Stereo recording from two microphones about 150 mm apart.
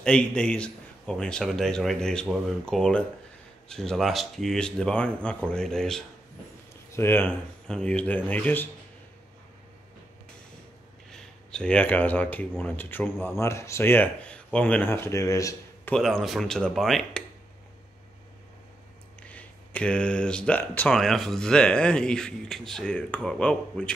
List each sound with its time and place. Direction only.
0.0 s speech: 5° left (ahead or behind)
6.9 s speech: 15° left (ahead or behind)
11.1 s speech: 5° left (ahead or behind); by 15.9 s 20° left (ahead or behind)
15.9 s speech: 5° left (ahead or behind)
19.2 s speech: 10° left (ahead or behind)